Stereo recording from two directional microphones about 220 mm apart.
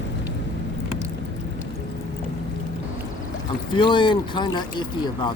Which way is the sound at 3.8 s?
20° left (ahead or behind).